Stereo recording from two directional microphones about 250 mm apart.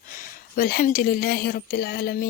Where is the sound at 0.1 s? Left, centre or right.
Left.